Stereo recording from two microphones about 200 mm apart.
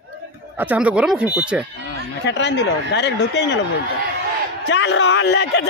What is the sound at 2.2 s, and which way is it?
Speech, 60° left (ahead or behind).